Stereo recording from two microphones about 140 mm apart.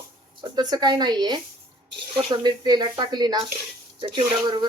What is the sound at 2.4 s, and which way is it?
Speech, 30° right (ahead or behind).